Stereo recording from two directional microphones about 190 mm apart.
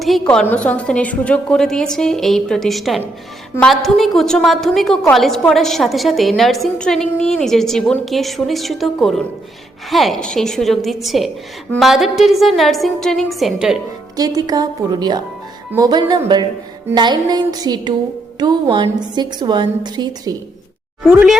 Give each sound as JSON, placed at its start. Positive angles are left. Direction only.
{"t": 0.0, "sound": "a woman's voice", "side_deg": 0}
{"t": 14.2, "sound": "a woman's voice", "side_deg": -20}
{"t": 21.0, "sound": "a woman's voice", "side_deg": -5}